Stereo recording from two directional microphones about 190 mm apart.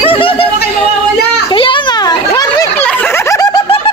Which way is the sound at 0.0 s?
30° left (ahead or behind).